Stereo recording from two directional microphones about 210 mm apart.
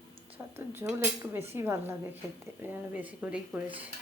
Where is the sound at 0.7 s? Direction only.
10° right (ahead or behind).